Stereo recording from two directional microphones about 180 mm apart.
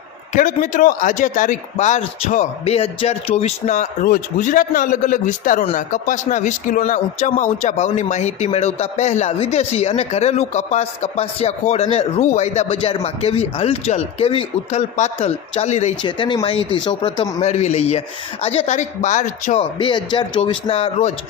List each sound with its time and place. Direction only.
0.3 s speech: 45° left (ahead or behind)
16.0 s speech: 25° left (ahead or behind)
17.4 s speech: 40° left (ahead or behind)
19.8 s speech: 25° left (ahead or behind)